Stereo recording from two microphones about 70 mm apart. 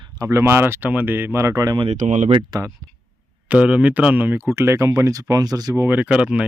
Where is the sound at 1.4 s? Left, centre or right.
Right.